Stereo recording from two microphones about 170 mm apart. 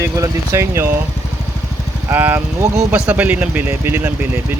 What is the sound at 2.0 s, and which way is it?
Speech, 10° right (ahead or behind).